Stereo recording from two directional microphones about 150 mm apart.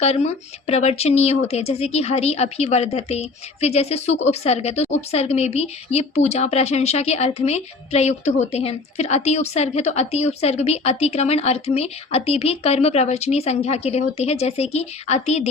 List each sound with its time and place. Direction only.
0.0 s speech: 45° left (ahead or behind)